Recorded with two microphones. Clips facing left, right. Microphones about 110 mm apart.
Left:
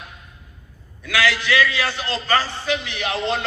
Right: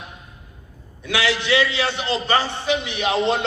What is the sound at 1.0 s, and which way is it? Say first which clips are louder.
A man's voice: left 1 dB; 25° right (ahead or behind).